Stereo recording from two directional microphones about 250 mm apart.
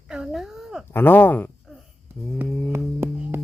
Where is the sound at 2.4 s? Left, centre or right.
Centre.